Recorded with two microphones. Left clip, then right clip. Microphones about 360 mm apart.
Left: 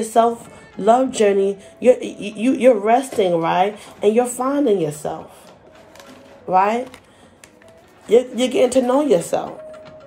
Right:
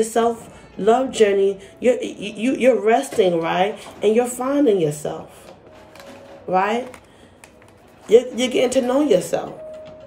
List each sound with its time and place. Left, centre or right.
0.0 s speech: centre
6.5 s speech: centre
8.1 s speech: centre